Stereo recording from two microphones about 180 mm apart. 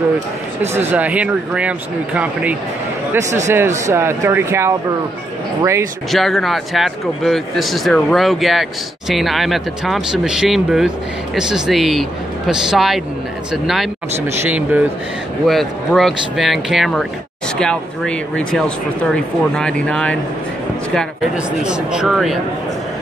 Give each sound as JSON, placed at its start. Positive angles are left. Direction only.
{"t": 0.6, "sound": "speech", "side_deg": -10}
{"t": 6.1, "sound": "speech", "side_deg": 0}
{"t": 15.4, "sound": "speech", "side_deg": 0}
{"t": 21.6, "sound": "speech", "side_deg": -5}